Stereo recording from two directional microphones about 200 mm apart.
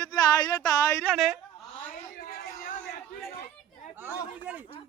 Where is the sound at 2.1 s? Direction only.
45° left (ahead or behind).